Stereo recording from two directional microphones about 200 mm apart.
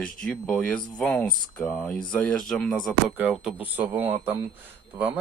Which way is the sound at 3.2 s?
5° right (ahead or behind).